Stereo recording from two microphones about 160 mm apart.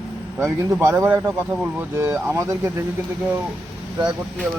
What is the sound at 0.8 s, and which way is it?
Speech, 15° right (ahead or behind).